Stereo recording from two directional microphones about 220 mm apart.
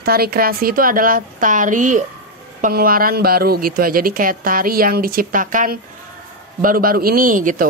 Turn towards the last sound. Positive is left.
turn(degrees=-35)  # may be behind; listen again after turning